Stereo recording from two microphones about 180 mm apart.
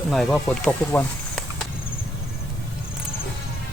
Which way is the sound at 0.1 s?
Centre (ahead or behind).